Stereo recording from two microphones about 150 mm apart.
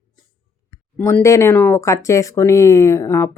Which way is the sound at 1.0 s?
15° left (ahead or behind).